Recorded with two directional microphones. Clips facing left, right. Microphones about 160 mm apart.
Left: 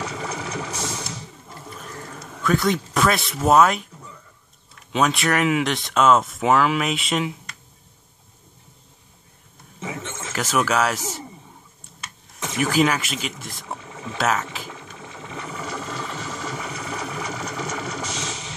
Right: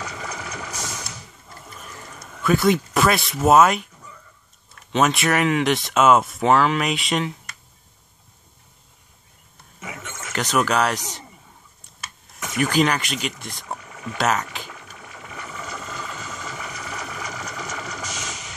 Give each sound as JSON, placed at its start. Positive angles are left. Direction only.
{"t": 0.0, "sound": "vehicle", "side_deg": 30}
{"t": 2.4, "sound": "speech", "side_deg": -5}
{"t": 4.9, "sound": "speech", "side_deg": 0}
{"t": 9.8, "sound": "a sound", "side_deg": 30}
{"t": 10.3, "sound": "speech", "side_deg": 5}
{"t": 12.5, "sound": "speech", "side_deg": 5}
{"t": 13.7, "sound": "boat", "side_deg": 25}
{"t": 14.1, "sound": "speech", "side_deg": 0}
{"t": 14.7, "sound": "ratchet", "side_deg": 25}